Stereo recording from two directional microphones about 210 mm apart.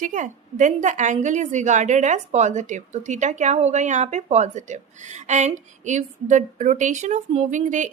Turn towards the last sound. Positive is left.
turn(degrees=-35)  # may be behind; listen again after turning